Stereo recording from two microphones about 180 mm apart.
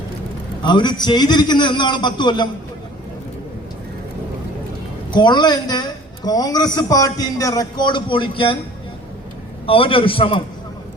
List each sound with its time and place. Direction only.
0.6 s speech: 25° left (ahead or behind)
5.1 s speech: 25° left (ahead or behind)
9.6 s speech: 30° left (ahead or behind)